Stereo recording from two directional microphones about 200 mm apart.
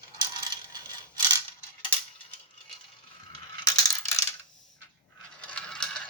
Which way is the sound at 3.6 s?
20° left (ahead or behind).